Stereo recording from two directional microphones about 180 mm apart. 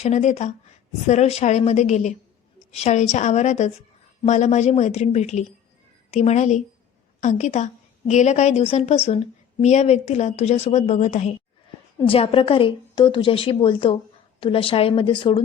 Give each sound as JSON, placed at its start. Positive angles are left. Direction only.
{"t": 0.0, "sound": "a woman's voice", "side_deg": 40}